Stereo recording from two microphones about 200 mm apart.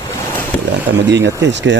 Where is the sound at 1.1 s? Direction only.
60° right (ahead or behind).